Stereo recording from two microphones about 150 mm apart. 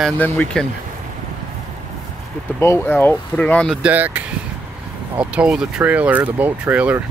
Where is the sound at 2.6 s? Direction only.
15° left (ahead or behind).